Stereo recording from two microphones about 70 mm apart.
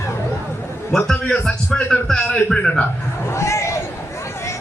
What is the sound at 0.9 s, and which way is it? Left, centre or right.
Speech, centre.